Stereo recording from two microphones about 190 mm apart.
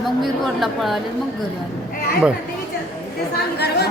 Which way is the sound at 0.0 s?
Centre (ahead or behind).